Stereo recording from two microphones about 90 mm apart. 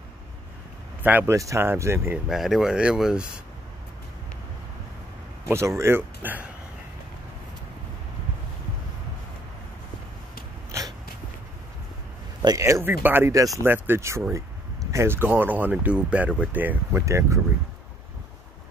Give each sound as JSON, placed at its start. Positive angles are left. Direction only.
{"t": 1.0, "sound": "speech", "side_deg": -20}
{"t": 1.3, "sound": "speech", "side_deg": -35}
{"t": 2.2, "sound": "speech", "side_deg": -5}
{"t": 5.5, "sound": "speech", "side_deg": -30}
{"t": 12.4, "sound": "speech", "side_deg": -40}
{"t": 12.8, "sound": "speech", "side_deg": -25}
{"t": 13.3, "sound": "speech", "side_deg": -40}
{"t": 13.7, "sound": "speech", "side_deg": -25}
{"t": 17.0, "sound": "speech", "side_deg": -35}